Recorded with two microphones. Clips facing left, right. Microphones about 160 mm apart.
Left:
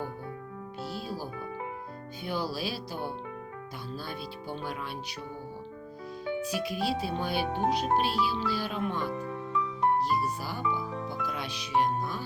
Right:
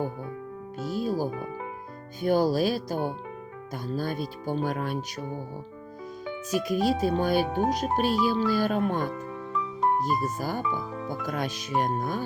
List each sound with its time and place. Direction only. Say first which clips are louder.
0.8 s speech: right 9 dB; 45° right (ahead or behind)
6.4 s speech: right 9 dB; 45° right (ahead or behind)